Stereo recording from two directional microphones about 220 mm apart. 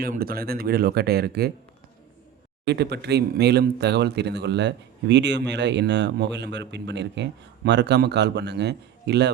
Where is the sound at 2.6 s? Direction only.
50° right (ahead or behind).